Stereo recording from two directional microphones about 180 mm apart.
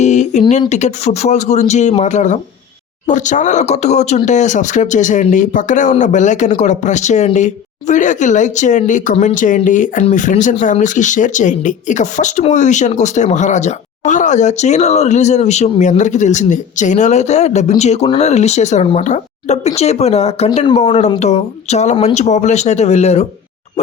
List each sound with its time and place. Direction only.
0.0 s speech: 40° left (ahead or behind)